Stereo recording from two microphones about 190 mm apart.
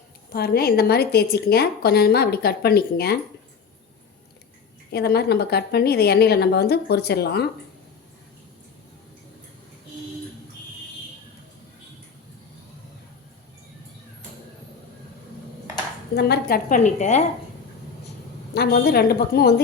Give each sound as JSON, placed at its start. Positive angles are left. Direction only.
{"t": 0.3, "sound": "a woman's voice", "side_deg": 55}
{"t": 4.9, "sound": "a woman's voice", "side_deg": 60}
{"t": 16.1, "sound": "a woman's voice", "side_deg": 60}
{"t": 16.6, "sound": "a woman's voice", "side_deg": 40}
{"t": 18.5, "sound": "a woman's voice", "side_deg": 55}